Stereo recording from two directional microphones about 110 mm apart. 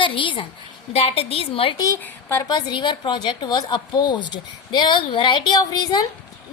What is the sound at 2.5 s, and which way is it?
A woman's voice, 45° left (ahead or behind).